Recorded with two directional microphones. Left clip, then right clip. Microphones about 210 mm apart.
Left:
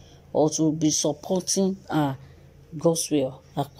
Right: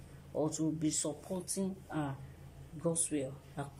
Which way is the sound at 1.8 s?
45° left (ahead or behind).